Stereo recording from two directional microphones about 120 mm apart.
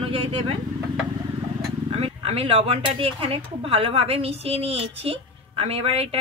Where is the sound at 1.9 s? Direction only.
55° right (ahead or behind).